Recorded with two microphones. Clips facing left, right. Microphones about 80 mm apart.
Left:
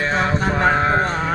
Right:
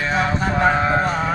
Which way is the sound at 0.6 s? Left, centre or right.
Left.